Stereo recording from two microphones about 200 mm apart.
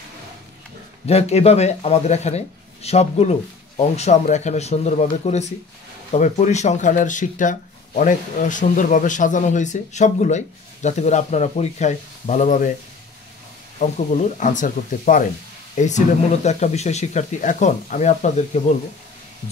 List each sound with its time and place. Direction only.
1.0 s speech: 30° left (ahead or behind)
13.7 s speech: 35° left (ahead or behind)